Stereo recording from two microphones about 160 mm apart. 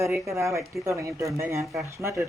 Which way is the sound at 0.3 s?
20° right (ahead or behind).